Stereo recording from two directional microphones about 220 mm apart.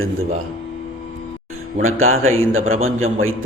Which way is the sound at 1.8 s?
70° right (ahead or behind).